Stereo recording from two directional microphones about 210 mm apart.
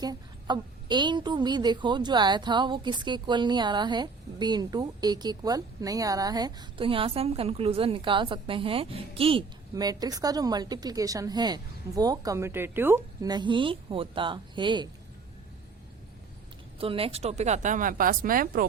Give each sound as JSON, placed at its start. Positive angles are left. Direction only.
{"t": 0.0, "sound": "a woman's voice", "side_deg": -20}
{"t": 16.7, "sound": "speech", "side_deg": -25}